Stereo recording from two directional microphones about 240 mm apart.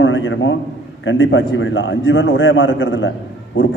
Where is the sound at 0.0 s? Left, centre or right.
Left.